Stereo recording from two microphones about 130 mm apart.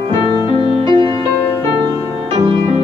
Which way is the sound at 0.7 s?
40° right (ahead or behind).